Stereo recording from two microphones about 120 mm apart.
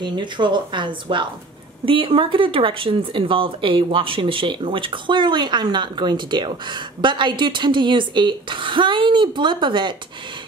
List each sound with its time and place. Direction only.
0.0 s speech: 40° right (ahead or behind)